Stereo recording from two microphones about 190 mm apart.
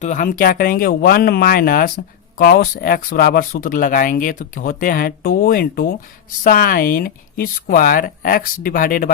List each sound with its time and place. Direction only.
0.0 s speech: 40° left (ahead or behind)